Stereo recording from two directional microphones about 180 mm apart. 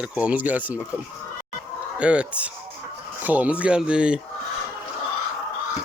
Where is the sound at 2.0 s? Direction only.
5° right (ahead or behind).